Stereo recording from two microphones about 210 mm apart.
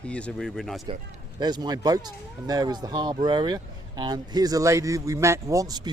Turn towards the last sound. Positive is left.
turn(degrees=-20)  # may be behind; listen again after turning